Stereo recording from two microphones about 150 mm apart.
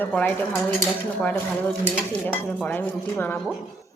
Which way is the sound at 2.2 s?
10° left (ahead or behind).